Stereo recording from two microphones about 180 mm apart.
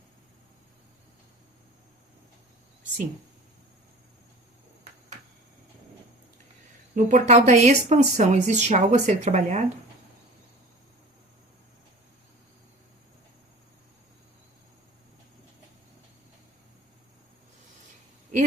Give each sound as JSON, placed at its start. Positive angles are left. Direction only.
{"t": 6.9, "sound": "speech", "side_deg": -40}